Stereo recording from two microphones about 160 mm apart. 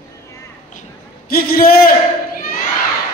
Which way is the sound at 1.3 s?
65° left (ahead or behind).